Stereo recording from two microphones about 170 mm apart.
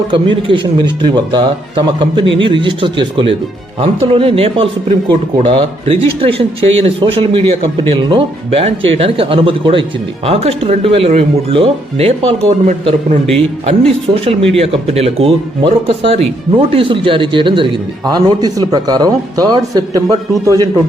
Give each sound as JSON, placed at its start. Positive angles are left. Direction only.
{"t": 0.1, "sound": "a man's voice", "side_deg": -30}
{"t": 14.5, "sound": "speech", "side_deg": -35}